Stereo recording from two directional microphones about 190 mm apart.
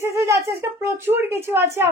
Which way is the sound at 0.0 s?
15° right (ahead or behind).